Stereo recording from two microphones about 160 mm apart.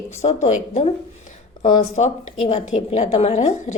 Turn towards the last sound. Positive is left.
turn(degrees=50)  # may be behind; listen again after turning